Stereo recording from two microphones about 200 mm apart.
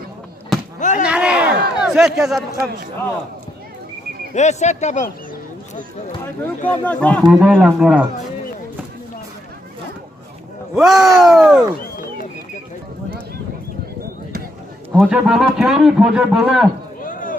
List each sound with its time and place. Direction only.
0.8 s a sound: 40° left (ahead or behind)
1.0 s a sound: 5° right (ahead or behind)
4.4 s speech: 35° left (ahead or behind)
6.7 s speech: 5° left (ahead or behind)
10.8 s speech: centre (ahead or behind)
15.0 s speech: 5° right (ahead or behind)
17.0 s chop: 45° left (ahead or behind)